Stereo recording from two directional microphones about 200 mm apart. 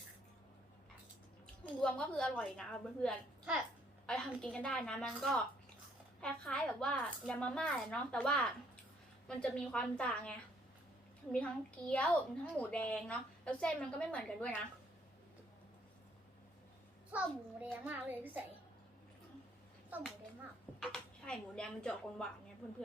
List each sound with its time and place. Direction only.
1.8 s a woman's voice: 5° left (ahead or behind)
17.1 s a child's voice: 5° right (ahead or behind)
19.9 s a child's voice: centre (ahead or behind)